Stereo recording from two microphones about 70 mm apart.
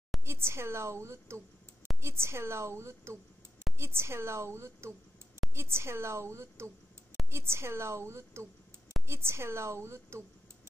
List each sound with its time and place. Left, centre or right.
0.2 s a woman's voice: right